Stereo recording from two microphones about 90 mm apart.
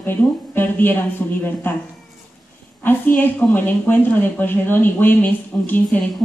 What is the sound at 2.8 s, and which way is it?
A woman's voice, 20° left (ahead or behind).